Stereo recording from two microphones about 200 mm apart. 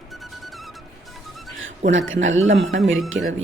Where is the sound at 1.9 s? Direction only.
70° right (ahead or behind).